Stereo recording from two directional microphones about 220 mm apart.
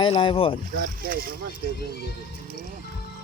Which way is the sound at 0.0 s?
25° left (ahead or behind).